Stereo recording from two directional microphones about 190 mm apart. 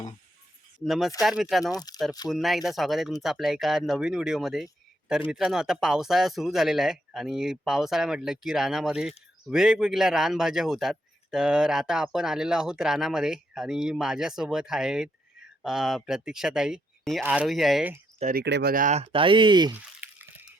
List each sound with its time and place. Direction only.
0.9 s speech: centre (ahead or behind)
1.7 s speech: 20° left (ahead or behind)
2.3 s speech: centre (ahead or behind)
18.2 s speech: 45° right (ahead or behind)
18.4 s speech: 65° right (ahead or behind)
18.7 s speech: 40° right (ahead or behind); by 19.7 s 25° right (ahead or behind)
19.7 s a sound: 10° right (ahead or behind)